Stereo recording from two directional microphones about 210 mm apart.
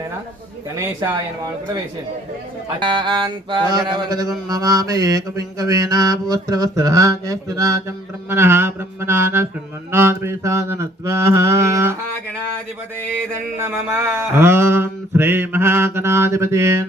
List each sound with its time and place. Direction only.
0.8 s mantra: 15° right (ahead or behind)
2.8 s music: 20° right (ahead or behind)
4.4 s mantra: 20° right (ahead or behind)
13.6 s mantra: 10° right (ahead or behind)